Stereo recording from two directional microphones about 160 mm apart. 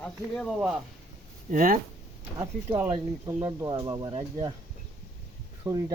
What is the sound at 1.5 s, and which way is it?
Speech, 60° right (ahead or behind).